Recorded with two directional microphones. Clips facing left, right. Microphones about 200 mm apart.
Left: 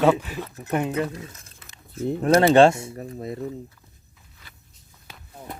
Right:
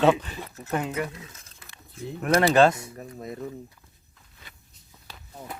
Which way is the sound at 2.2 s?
30° left (ahead or behind).